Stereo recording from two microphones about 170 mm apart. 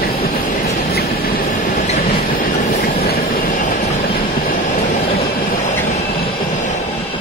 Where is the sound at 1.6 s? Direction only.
45° left (ahead or behind).